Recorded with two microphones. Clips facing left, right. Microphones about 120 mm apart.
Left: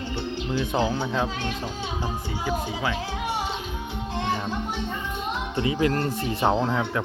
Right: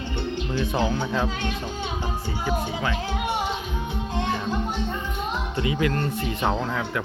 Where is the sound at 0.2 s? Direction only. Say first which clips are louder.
Right 1 dB; 10° left (ahead or behind).